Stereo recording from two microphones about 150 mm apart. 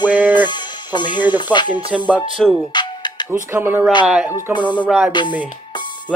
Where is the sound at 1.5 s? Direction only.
30° left (ahead or behind).